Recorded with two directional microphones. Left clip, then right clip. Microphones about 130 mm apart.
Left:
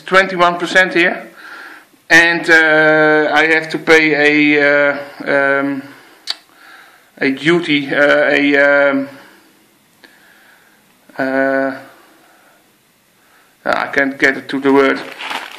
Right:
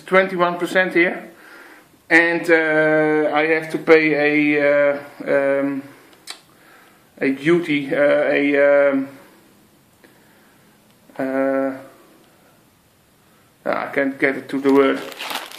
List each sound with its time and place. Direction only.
0.0 s speech: 25° left (ahead or behind)
11.1 s speech: 25° left (ahead or behind)
13.6 s speech: 25° left (ahead or behind)